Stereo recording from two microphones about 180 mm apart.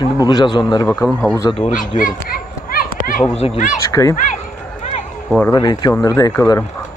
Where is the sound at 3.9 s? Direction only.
15° left (ahead or behind).